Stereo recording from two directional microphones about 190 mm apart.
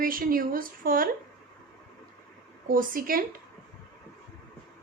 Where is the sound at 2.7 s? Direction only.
45° right (ahead or behind).